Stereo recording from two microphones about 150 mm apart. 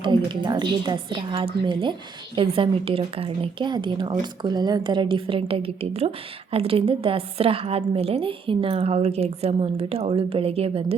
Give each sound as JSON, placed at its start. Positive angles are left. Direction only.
{"t": 0.0, "sound": "speech", "side_deg": -30}